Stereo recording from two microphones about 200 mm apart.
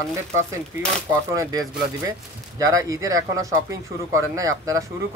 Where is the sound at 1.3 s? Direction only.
15° right (ahead or behind).